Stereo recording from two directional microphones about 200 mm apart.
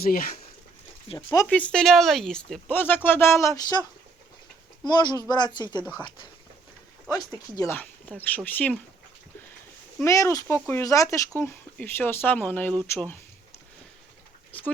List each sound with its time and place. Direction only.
0.0 s speech: 45° left (ahead or behind)
1.1 s speech: 30° left (ahead or behind)
1.5 s speech: 5° left (ahead or behind)
4.9 s speech: 20° left (ahead or behind)
7.1 s speech: 15° left (ahead or behind)
10.0 s speech: 15° left (ahead or behind)